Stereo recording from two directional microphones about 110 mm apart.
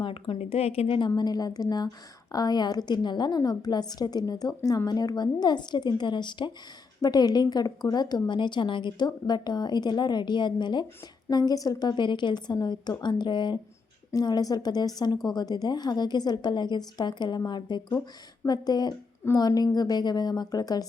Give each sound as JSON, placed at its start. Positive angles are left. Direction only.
{"t": 0.0, "sound": "a woman's voice", "side_deg": 55}